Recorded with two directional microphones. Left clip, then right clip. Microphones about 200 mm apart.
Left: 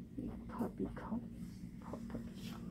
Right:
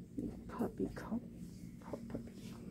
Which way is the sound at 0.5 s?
20° right (ahead or behind).